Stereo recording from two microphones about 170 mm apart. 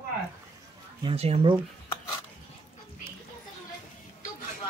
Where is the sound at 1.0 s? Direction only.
35° right (ahead or behind).